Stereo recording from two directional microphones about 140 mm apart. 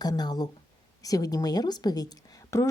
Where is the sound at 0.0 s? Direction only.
30° left (ahead or behind).